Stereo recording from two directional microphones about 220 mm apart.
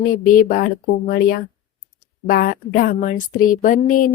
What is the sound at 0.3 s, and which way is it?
A woman's voice, 40° left (ahead or behind).